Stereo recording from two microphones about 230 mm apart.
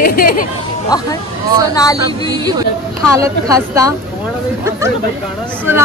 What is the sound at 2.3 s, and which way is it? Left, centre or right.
A woman's voice, centre.